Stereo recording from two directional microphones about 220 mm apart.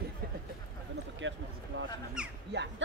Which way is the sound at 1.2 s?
60° right (ahead or behind).